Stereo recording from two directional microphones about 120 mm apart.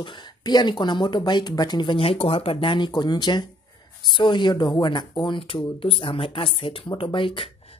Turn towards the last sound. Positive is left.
turn(degrees=45)  # may be behind; listen again after turning